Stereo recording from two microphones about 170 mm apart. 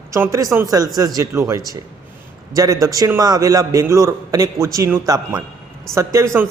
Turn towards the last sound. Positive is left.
turn(degrees=-15)  # may be behind; listen again after turning